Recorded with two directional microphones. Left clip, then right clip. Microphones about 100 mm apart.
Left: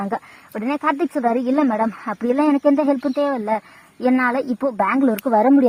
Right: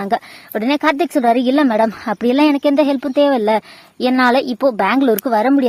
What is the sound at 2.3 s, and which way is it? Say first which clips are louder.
A woman's voice: right 3 dB; 30° right (ahead or behind).